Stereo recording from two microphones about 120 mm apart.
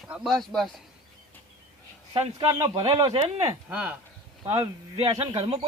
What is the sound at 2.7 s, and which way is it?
Speech, 55° right (ahead or behind).